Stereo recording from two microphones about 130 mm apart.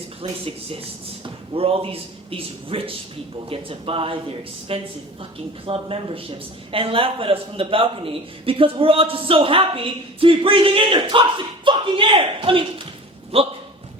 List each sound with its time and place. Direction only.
0.2 s a man's voice: 50° right (ahead or behind)